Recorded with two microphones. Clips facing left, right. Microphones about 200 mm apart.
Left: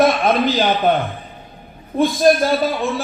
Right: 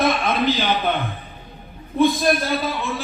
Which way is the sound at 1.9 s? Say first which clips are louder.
Left 3 dB; 50° left (ahead or behind).